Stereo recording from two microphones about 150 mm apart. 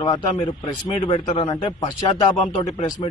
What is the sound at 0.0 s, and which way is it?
Speech, 30° left (ahead or behind).